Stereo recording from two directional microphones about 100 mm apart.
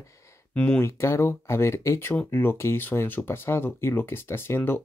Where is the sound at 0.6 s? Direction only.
20° left (ahead or behind).